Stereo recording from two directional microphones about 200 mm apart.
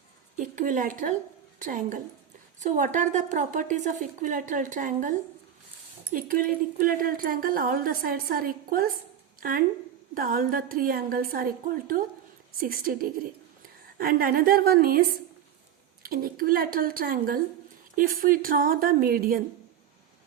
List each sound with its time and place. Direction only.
0.3 s a woman's voice: 40° right (ahead or behind)
6.1 s speech: 45° right (ahead or behind)
16.0 s speech: 45° right (ahead or behind)